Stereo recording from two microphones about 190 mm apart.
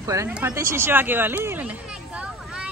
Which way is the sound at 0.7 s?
10° right (ahead or behind).